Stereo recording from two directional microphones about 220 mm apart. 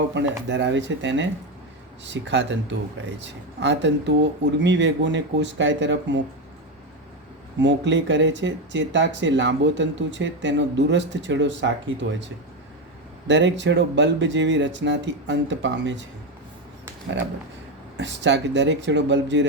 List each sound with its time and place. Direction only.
0.1 s speech: 55° right (ahead or behind)
7.6 s speech: 55° right (ahead or behind)
17.9 s speech: 55° right (ahead or behind)